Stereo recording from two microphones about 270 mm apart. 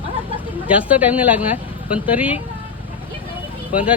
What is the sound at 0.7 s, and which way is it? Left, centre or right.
Speech, centre.